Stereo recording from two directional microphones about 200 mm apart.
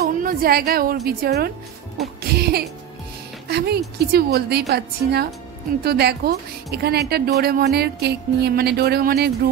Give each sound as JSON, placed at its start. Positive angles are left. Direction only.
{"t": 0.0, "sound": "a woman's voice", "side_deg": -45}